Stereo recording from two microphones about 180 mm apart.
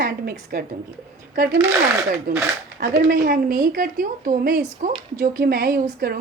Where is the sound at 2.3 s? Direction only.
50° right (ahead or behind).